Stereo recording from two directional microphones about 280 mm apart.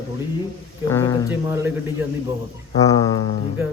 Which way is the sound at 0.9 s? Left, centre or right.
Centre.